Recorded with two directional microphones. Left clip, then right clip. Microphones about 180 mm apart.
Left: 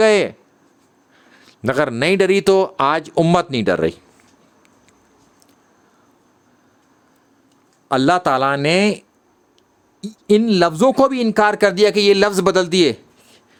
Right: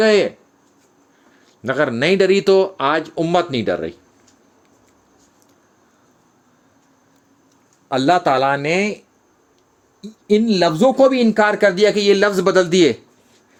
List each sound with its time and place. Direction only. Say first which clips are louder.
0.0 s speech: even; 40° left (ahead or behind)
7.9 s speech: even; 35° left (ahead or behind)